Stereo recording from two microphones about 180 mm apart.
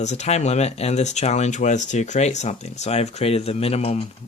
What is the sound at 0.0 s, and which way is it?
Speech, 40° left (ahead or behind).